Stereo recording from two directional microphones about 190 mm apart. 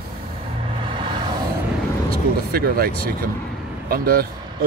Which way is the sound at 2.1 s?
55° right (ahead or behind).